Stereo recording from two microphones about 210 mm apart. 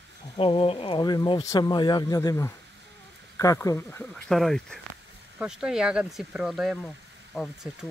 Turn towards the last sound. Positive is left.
turn(degrees=0)  # may be behind; listen again after turning